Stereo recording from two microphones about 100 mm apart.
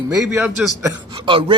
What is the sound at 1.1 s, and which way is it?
Speech, 60° right (ahead or behind).